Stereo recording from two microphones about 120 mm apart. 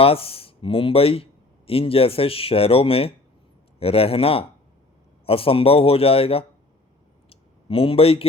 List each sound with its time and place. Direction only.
0.0 s a man's voice: 50° left (ahead or behind)
7.3 s clicking: 50° left (ahead or behind)